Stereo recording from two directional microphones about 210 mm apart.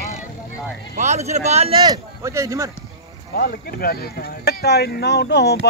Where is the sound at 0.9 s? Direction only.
35° right (ahead or behind); by 2.7 s 15° right (ahead or behind).